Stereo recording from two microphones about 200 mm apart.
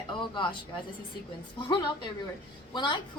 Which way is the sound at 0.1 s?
25° left (ahead or behind).